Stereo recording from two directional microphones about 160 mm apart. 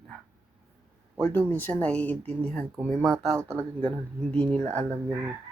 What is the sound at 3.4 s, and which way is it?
Speech, 15° right (ahead or behind).